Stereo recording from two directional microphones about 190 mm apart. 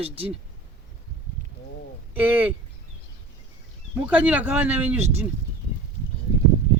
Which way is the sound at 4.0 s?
10° right (ahead or behind).